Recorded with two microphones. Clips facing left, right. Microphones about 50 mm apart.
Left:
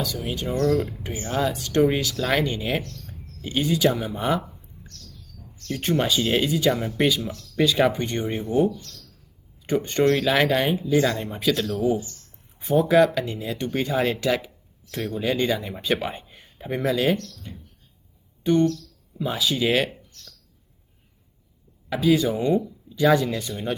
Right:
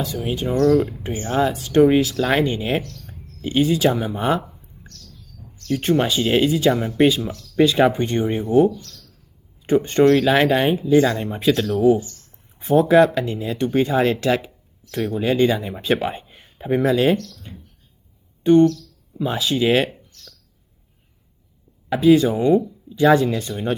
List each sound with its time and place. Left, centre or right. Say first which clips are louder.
0.0 s speech: right 4 dB; right
9.6 s speech: right 6 dB; right
10.1 s speech: right 3 dB; centre
12.5 s a sound: right 4 dB; centre
13.1 s speech: right 4 dB; centre
16.2 s a sound: right 7 dB; centre
17.0 s speech: right 4 dB; centre
19.2 s speech: right 4 dB; centre
21.8 s speech: right 6 dB; centre